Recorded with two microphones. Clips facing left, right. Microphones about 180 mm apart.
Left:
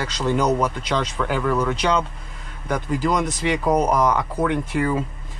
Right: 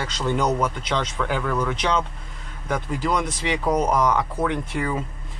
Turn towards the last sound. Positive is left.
turn(degrees=0)  # may be behind; listen again after turning